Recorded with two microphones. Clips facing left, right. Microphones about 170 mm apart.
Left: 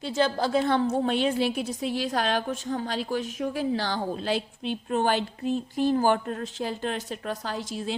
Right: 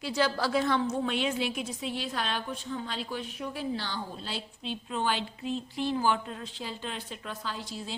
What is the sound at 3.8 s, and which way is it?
A woman's voice, 80° left.